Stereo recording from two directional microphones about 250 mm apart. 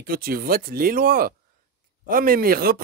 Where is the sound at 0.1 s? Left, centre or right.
Right.